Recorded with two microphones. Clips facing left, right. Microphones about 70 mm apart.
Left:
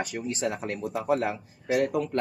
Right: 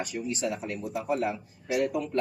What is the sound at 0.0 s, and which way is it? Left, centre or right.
Speech, left.